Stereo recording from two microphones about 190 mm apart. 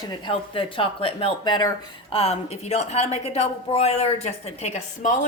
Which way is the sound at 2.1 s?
35° left (ahead or behind).